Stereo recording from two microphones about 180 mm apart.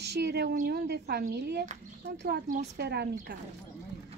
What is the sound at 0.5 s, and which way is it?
Speech, 55° right (ahead or behind).